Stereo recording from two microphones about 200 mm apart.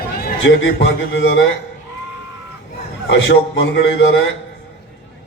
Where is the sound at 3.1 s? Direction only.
60° left (ahead or behind).